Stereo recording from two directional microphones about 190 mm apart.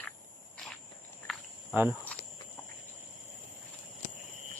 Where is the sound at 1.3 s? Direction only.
Centre (ahead or behind).